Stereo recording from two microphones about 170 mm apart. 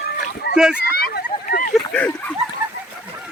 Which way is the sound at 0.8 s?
65° left (ahead or behind).